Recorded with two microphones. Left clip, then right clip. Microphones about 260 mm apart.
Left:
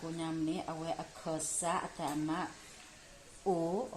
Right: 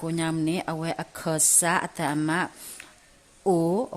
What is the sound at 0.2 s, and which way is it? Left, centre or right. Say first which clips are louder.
Speech: right 9 dB; right.